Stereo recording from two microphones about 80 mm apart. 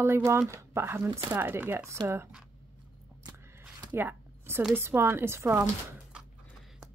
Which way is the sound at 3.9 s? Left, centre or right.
Right.